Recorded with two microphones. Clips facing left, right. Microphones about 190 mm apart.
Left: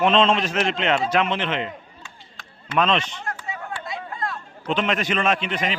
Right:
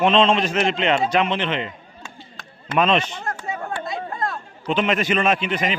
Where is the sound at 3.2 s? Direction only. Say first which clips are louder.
Right 4 dB; 45° right (ahead or behind).